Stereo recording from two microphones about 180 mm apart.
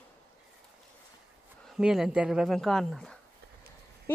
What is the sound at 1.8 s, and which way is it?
Speech, 5° right (ahead or behind).